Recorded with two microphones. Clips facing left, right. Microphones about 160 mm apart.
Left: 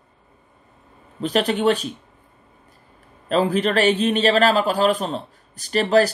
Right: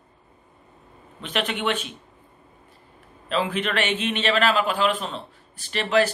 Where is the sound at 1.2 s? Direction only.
35° left (ahead or behind).